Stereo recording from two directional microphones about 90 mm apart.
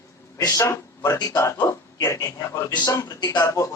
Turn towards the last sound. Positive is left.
turn(degrees=35)  # may be behind; listen again after turning